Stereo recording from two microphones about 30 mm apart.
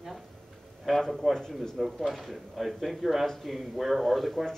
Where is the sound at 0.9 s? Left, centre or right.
Centre.